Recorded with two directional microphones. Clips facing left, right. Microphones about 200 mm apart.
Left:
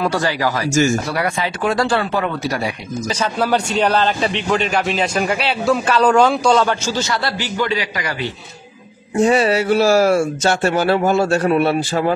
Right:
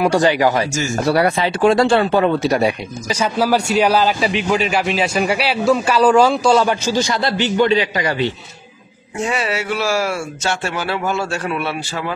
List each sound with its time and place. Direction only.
0.0 s speech: 15° right (ahead or behind)
1.1 s speech: 30° right (ahead or behind)
3.1 s a man's voice: 10° right (ahead or behind); by 8.3 s 25° right (ahead or behind)
9.1 s speech: 35° left (ahead or behind)